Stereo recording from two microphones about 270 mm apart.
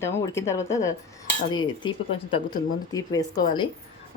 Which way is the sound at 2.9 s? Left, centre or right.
Centre.